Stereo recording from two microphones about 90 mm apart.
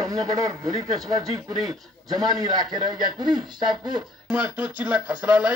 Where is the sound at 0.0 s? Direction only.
45° right (ahead or behind).